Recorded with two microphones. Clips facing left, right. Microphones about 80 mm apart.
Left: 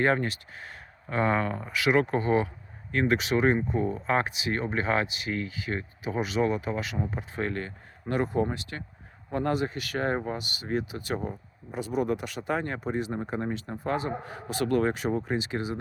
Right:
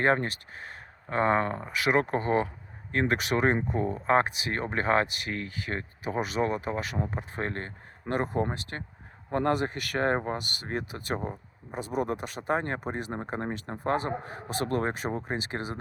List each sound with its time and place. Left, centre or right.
0.0 s speech: right